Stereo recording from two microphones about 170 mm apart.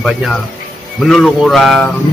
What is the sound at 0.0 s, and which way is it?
A man's voice, centre (ahead or behind).